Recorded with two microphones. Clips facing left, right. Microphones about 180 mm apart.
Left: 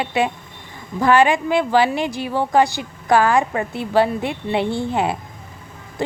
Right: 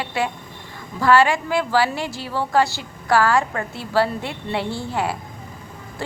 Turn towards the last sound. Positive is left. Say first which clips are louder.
# left 6 dB
turn(degrees=20)  # may be behind; listen again after turning